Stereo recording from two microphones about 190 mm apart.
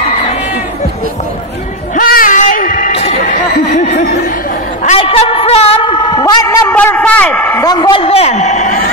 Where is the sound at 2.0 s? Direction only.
50° left (ahead or behind).